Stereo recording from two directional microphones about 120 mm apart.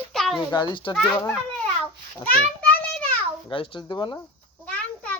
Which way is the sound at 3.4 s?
45° left (ahead or behind).